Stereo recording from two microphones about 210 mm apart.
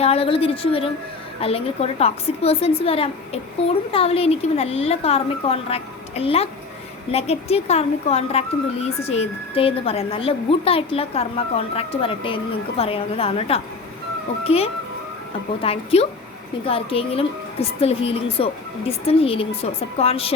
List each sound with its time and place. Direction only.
0.0 s speech: 30° left (ahead or behind)